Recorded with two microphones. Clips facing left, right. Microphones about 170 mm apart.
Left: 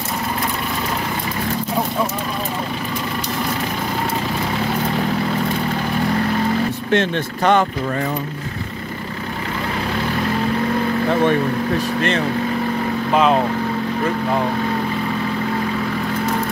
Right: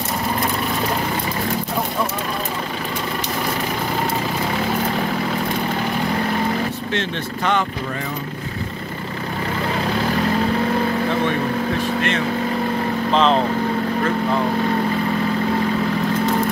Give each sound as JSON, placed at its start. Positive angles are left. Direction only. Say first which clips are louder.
{"t": 6.9, "sound": "speech", "louder": "left 6 dB", "side_deg": 50}
{"t": 13.1, "sound": "speech", "louder": "left 1 dB", "side_deg": 10}